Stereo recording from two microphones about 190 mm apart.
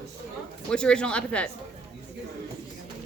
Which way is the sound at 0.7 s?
5° left (ahead or behind).